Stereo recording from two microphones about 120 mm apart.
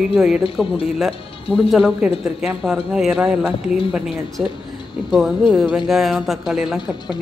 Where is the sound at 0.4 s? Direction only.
50° left (ahead or behind).